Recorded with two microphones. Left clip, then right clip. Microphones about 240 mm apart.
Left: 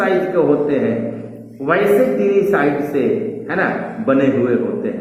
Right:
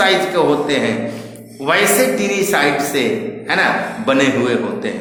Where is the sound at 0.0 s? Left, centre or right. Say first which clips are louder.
Right 2 dB; right.